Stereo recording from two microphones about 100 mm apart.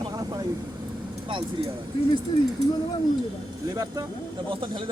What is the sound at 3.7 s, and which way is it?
Speech, 30° right (ahead or behind).